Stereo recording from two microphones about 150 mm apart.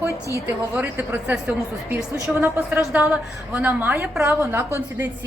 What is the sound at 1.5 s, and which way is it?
Speech, 5° right (ahead or behind).